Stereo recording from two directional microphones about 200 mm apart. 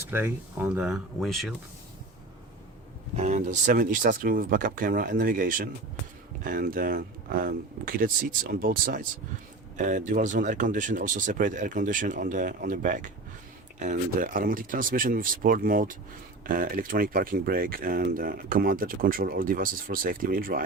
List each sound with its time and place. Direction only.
0.1 s speech: 10° right (ahead or behind)
3.2 s speech: 35° right (ahead or behind)